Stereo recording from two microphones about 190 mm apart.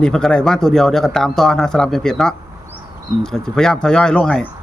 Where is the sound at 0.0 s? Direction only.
5° left (ahead or behind).